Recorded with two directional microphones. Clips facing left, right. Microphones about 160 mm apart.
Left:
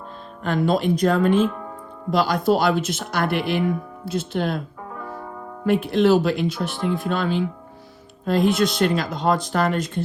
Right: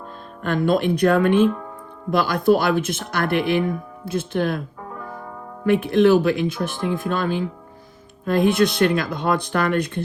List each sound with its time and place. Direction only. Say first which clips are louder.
0.4 s speech: right 1 dB; 55° right (ahead or behind)
5.6 s speech: right 2 dB; 55° right (ahead or behind)